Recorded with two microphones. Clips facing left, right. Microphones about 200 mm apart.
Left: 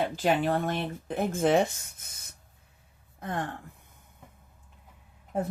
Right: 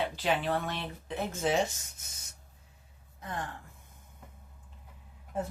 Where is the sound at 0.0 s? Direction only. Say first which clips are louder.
Left 5 dB; 45° left (ahead or behind).